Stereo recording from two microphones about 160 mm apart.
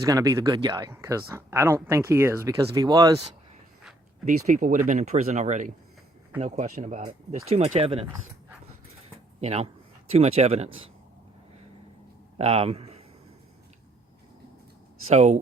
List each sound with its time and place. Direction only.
0.0 s speech: 20° right (ahead or behind)
4.3 s speech: 55° right (ahead or behind); by 8.1 s 40° right (ahead or behind)
9.4 s speech: 40° right (ahead or behind)
12.4 s speech: 40° right (ahead or behind)
15.0 s speech: 45° right (ahead or behind)